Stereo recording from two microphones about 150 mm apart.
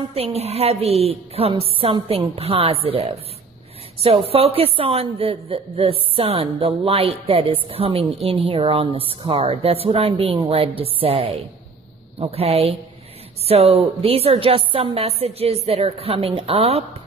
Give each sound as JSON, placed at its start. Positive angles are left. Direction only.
{"t": 0.1, "sound": "a woman's voice", "side_deg": -40}